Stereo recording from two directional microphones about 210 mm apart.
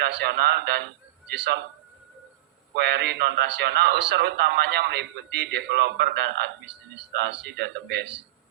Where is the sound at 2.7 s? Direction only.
50° right (ahead or behind).